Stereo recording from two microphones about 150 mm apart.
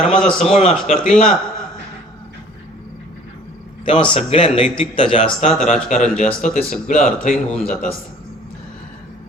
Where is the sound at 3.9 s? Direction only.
35° left (ahead or behind).